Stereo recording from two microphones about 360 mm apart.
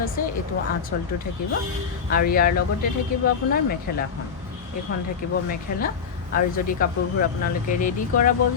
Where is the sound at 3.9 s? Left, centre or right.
Left.